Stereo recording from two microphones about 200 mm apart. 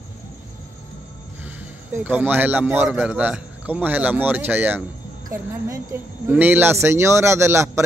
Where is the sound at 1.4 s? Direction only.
10° right (ahead or behind).